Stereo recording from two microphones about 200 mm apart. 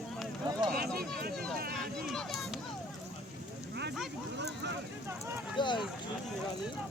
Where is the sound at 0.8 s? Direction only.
50° right (ahead or behind).